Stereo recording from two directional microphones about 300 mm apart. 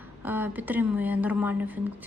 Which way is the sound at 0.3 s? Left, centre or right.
Centre.